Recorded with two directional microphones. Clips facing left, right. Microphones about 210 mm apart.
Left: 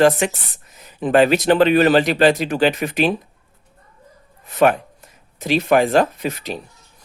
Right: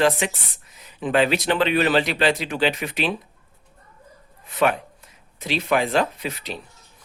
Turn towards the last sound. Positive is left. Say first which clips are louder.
# left 6 dB
turn(degrees=45)  # may be behind; listen again after turning